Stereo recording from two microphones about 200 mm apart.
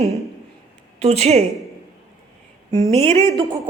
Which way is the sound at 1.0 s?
30° right (ahead or behind).